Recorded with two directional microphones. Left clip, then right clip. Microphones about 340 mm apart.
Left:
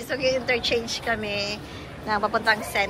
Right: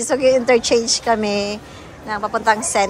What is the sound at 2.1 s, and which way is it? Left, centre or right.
Speech, centre.